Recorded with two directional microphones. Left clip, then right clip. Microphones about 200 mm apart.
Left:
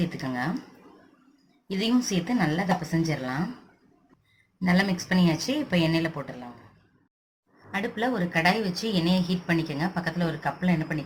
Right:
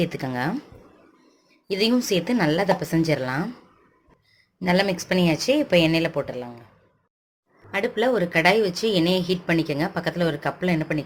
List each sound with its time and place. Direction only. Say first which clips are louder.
0.0 s speech: right 5 dB; 45° right (ahead or behind)
1.6 s speech: right 5 dB; 45° right (ahead or behind)
4.6 s speech: right 5 dB; 40° right (ahead or behind)
7.7 s speech: right 6 dB; 50° right (ahead or behind)